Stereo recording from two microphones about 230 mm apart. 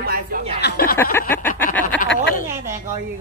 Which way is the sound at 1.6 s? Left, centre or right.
Centre.